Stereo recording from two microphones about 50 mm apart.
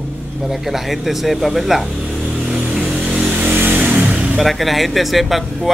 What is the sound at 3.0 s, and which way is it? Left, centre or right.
Vehicle, centre.